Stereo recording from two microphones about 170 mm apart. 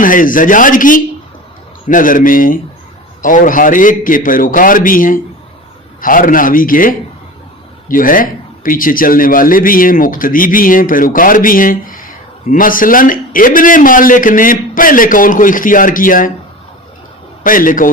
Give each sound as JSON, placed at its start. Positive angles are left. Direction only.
{"t": 0.0, "sound": "a man's voice", "side_deg": 55}
{"t": 17.4, "sound": "a man's voice", "side_deg": 55}